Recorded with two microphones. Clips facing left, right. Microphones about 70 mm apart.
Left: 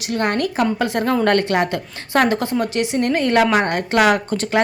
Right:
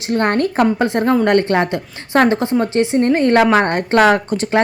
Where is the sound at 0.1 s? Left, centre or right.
Right.